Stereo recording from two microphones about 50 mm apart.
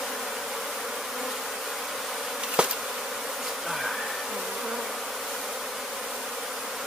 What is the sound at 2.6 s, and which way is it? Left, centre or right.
Bee, centre.